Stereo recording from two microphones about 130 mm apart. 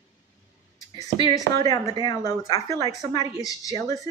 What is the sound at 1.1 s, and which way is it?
Speech, 30° left (ahead or behind).